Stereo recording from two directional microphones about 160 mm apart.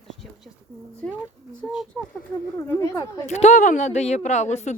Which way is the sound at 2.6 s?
20° left (ahead or behind).